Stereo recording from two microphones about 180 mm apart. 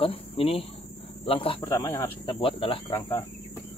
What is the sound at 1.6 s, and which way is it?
Speech, 15° left (ahead or behind).